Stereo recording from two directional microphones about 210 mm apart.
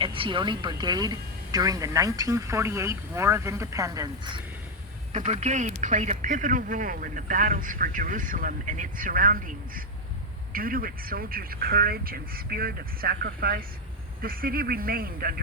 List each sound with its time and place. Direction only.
0.0 s a woman's voice: 25° right (ahead or behind)
5.1 s speech: 35° right (ahead or behind)